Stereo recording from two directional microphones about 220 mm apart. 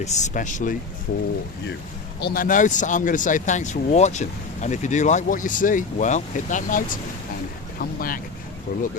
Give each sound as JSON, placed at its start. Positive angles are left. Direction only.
{"t": 0.0, "sound": "speech", "side_deg": 30}
{"t": 2.2, "sound": "speech", "side_deg": 40}